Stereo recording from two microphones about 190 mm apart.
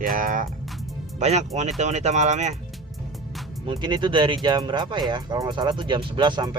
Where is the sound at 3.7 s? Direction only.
25° right (ahead or behind).